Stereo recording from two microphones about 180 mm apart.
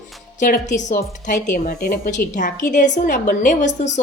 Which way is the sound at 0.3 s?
45° left (ahead or behind).